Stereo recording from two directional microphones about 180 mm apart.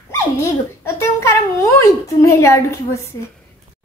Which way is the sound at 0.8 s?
15° left (ahead or behind).